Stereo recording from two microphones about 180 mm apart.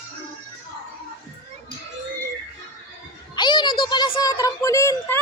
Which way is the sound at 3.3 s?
25° left (ahead or behind).